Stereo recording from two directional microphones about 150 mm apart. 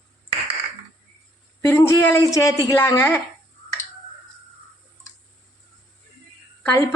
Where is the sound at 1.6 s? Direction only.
15° left (ahead or behind).